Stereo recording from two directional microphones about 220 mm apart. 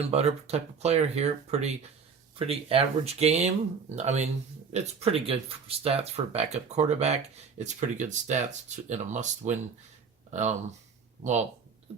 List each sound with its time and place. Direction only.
0.0 s speech: 30° right (ahead or behind)